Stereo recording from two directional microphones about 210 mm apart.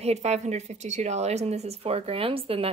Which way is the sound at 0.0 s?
30° right (ahead or behind).